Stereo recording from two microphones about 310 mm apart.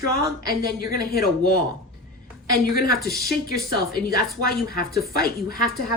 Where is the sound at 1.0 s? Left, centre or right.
Left.